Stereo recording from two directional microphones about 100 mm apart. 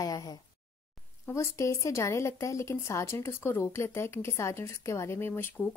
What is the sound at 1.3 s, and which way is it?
Speech, 30° left (ahead or behind).